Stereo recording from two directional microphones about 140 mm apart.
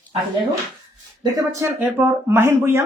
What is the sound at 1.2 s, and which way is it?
Speech, 25° right (ahead or behind).